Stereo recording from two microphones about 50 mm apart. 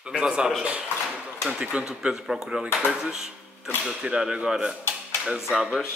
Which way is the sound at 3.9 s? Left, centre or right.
Centre.